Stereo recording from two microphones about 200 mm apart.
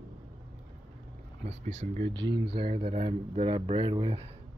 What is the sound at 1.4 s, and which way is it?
Speech, 35° right (ahead or behind).